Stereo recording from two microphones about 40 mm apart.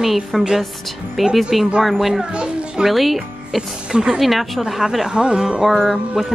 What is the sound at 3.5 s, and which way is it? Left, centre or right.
Speech, centre.